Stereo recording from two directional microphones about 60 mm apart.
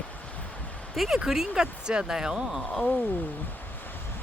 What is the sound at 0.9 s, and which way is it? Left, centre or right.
Speech, centre.